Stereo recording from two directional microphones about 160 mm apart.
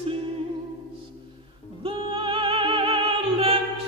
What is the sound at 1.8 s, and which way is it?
Music, 30° right (ahead or behind).